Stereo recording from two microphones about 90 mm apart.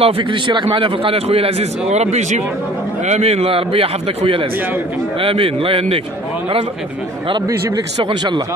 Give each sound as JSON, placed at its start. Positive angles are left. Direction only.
{"t": 0.0, "sound": "a man's voice", "side_deg": -65}
{"t": 3.3, "sound": "a man's voice", "side_deg": -90}
{"t": 8.0, "sound": "speech", "side_deg": -55}